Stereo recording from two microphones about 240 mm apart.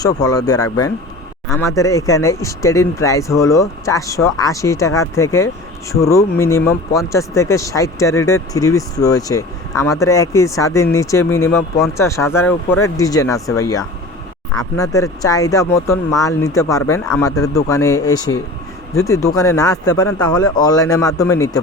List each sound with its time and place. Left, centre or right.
0.0 s speech: centre